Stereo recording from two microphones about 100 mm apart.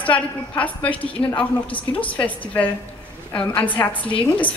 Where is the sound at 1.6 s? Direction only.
60° left (ahead or behind).